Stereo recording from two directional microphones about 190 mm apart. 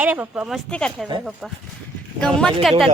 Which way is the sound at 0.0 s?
10° right (ahead or behind).